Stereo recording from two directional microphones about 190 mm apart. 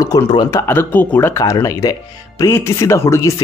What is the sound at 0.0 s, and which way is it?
Speech, 20° left (ahead or behind).